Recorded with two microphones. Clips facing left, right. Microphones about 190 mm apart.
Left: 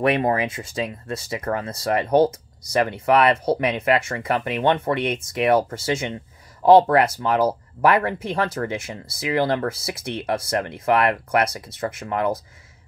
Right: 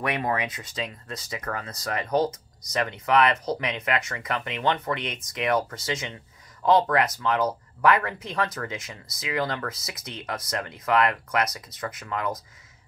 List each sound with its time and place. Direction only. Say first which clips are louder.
0.0 s speech: left 7 dB; 30° left (ahead or behind)